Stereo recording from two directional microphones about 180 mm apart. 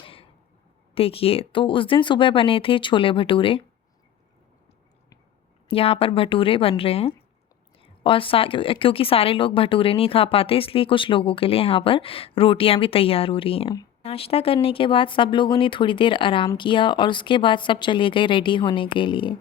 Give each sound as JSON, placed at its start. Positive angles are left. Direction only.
{"t": 0.0, "sound": "a sound", "side_deg": 30}
{"t": 0.9, "sound": "a woman's voice", "side_deg": 30}
{"t": 5.6, "sound": "a woman's voice", "side_deg": 30}